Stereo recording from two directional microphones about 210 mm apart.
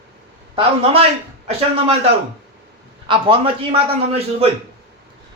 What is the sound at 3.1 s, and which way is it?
A man's voice, 25° right (ahead or behind).